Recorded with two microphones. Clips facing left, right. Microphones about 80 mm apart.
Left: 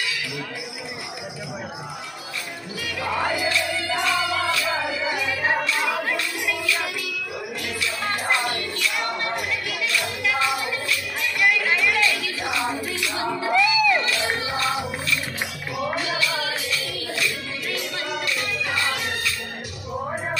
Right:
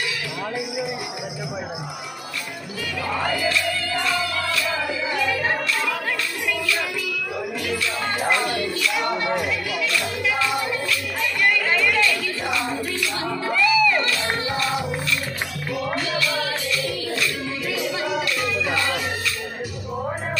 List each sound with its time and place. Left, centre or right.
3.3 s music: centre
8.5 s music: centre
11.4 s music: centre
13.2 s music: centre
15.9 s music: centre